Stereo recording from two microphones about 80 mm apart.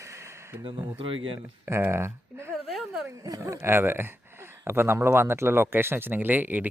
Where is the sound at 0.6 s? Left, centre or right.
Right.